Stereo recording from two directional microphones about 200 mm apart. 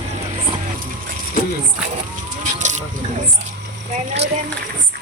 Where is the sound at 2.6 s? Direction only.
35° right (ahead or behind).